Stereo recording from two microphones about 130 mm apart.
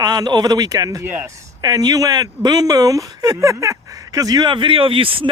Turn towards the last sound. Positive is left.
turn(degrees=-45)  # may be behind; listen again after turning